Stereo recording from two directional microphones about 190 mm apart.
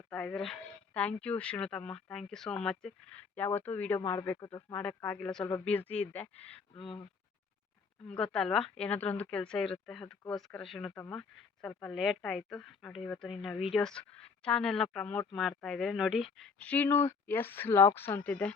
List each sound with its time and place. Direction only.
0.1 s speech: 5° left (ahead or behind)
6.7 s speech: 25° left (ahead or behind)
8.1 s speech: 5° left (ahead or behind)